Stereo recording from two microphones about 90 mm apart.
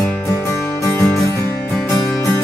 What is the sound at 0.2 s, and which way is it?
Music, 35° left (ahead or behind).